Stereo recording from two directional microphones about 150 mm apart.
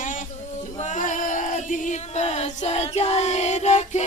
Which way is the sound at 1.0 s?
60° left (ahead or behind).